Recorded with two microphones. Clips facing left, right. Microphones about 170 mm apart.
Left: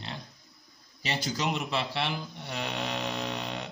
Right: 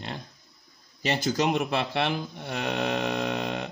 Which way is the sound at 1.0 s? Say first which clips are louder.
Right 6 dB; 50° right (ahead or behind).